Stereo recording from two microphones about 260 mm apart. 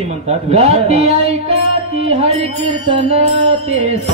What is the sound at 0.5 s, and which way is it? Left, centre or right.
Speech, right.